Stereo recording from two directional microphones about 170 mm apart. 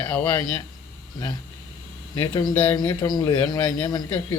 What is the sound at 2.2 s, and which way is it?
A man's voice, 25° left (ahead or behind).